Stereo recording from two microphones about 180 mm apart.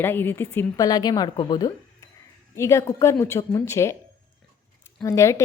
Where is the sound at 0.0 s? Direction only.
10° left (ahead or behind).